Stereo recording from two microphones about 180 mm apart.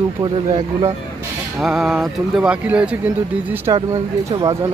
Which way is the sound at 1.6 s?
Centre (ahead or behind).